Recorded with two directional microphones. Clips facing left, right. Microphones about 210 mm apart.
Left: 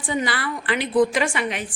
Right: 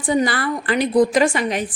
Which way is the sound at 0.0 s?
40° right (ahead or behind).